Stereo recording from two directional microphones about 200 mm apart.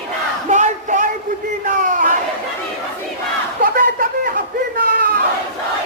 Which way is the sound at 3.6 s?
45° right (ahead or behind).